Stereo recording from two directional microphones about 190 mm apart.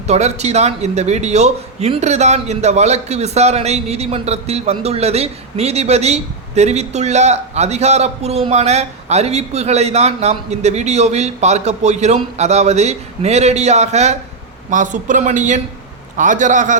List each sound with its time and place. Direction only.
0.1 s a man's voice: 35° right (ahead or behind)